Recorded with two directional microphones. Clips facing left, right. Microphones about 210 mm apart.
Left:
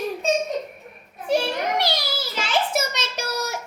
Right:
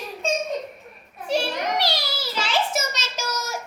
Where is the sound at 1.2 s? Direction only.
55° left (ahead or behind).